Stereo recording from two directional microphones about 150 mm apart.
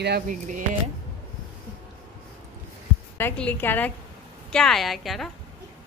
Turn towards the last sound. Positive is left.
turn(degrees=0)  # may be behind; listen again after turning